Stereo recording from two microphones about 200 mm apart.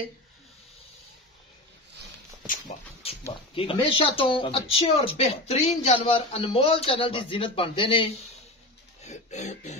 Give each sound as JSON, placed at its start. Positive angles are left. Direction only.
{"t": 3.0, "sound": "speech", "side_deg": 30}